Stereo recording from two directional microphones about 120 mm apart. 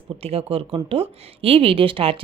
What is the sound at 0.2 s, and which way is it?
Speech, 55° right (ahead or behind).